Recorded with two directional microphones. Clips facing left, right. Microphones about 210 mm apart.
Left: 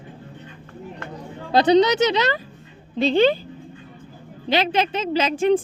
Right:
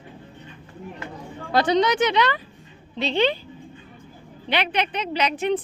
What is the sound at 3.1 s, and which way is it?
Speech, 50° left (ahead or behind).